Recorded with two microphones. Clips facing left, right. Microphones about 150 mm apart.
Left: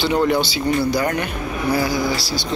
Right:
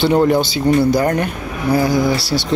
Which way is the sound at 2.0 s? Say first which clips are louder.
Right 5 dB; 65° right (ahead or behind).